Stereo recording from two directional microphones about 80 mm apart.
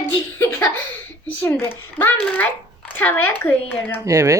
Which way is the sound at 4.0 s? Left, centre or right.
Right.